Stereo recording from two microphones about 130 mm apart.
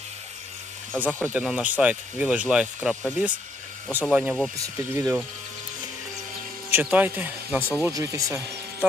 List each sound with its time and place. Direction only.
0.9 s speech: 15° right (ahead or behind)
4.5 s speech: 25° right (ahead or behind)
6.7 s speech: 15° right (ahead or behind)